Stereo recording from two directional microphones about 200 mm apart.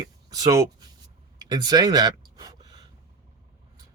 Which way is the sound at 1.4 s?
20° right (ahead or behind).